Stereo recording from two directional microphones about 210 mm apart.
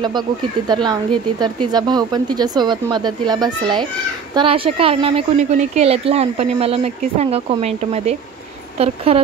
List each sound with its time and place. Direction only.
1.4 s a woman's voice: 20° right (ahead or behind)